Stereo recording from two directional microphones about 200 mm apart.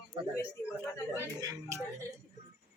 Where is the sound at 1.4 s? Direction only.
20° right (ahead or behind).